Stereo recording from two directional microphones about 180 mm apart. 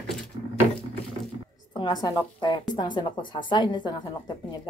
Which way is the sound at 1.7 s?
25° left (ahead or behind).